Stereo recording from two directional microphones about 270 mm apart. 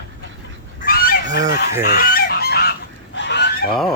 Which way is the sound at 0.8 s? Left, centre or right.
Left.